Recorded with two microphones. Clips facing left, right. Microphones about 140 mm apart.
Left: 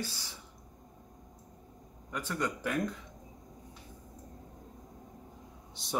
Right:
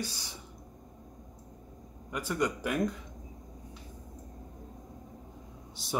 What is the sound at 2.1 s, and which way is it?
Speech, 10° right (ahead or behind).